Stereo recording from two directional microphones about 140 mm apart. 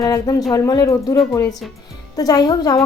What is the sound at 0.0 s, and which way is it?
A woman's voice, 25° left (ahead or behind).